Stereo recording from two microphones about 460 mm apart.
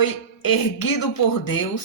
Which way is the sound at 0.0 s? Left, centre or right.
Left.